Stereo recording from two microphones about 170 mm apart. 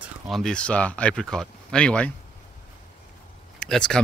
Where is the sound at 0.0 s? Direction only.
Centre (ahead or behind).